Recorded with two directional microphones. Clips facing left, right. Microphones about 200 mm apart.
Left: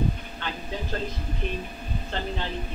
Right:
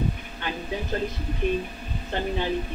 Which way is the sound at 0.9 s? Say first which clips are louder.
Right 4 dB; 15° right (ahead or behind).